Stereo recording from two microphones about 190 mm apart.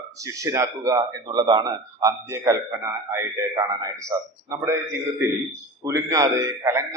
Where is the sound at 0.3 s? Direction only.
15° right (ahead or behind).